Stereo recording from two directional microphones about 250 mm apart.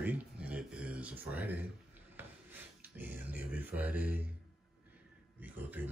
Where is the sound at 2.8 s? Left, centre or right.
Centre.